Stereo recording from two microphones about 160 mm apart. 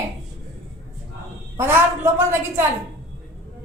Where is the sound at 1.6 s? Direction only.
15° right (ahead or behind).